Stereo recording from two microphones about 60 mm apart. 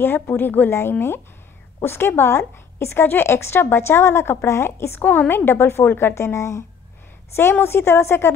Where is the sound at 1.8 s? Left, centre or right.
Left.